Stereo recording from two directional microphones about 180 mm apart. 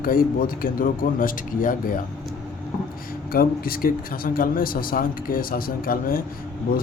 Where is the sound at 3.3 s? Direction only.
55° left (ahead or behind).